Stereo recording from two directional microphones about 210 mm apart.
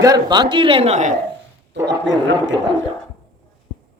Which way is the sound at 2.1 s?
60° right (ahead or behind).